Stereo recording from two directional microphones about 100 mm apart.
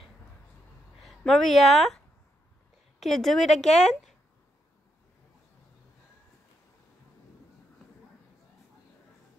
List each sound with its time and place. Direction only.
1.0 s speech: 5° left (ahead or behind)
3.0 s a woman's voice: 5° left (ahead or behind)